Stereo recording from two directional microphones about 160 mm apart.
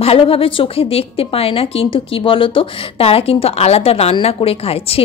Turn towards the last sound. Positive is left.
turn(degrees=35)  # may be behind; listen again after turning